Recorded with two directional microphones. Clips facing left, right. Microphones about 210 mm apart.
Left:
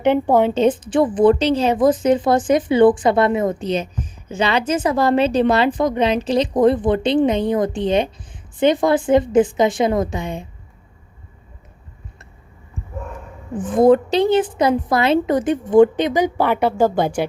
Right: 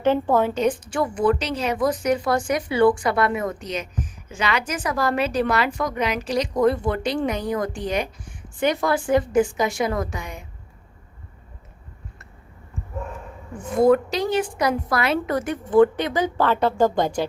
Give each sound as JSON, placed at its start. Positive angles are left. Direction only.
{"t": 0.0, "sound": "speech", "side_deg": 15}
{"t": 13.7, "sound": "speech", "side_deg": 25}